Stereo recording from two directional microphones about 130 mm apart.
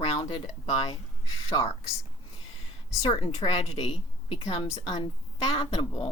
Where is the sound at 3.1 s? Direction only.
45° left (ahead or behind).